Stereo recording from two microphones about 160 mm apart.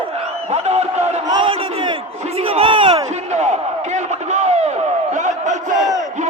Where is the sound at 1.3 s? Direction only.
30° right (ahead or behind).